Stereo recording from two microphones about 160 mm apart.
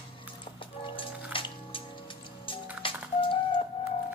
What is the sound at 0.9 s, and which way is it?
Water, 30° left (ahead or behind).